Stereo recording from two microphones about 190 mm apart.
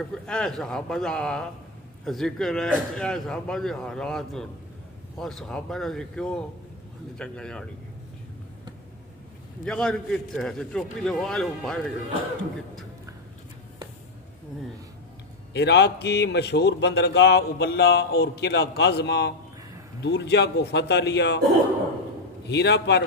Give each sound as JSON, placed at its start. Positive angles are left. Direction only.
{"t": 0.0, "sound": "a man's voice", "side_deg": 5}
{"t": 9.7, "sound": "a man's voice", "side_deg": 5}
{"t": 15.5, "sound": "a man's voice", "side_deg": 65}
{"t": 22.5, "sound": "a man's voice", "side_deg": 65}